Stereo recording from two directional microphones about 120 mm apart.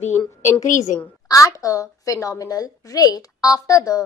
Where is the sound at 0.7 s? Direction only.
90° left.